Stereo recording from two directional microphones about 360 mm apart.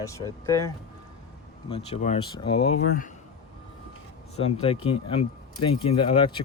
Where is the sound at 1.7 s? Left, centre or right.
Centre.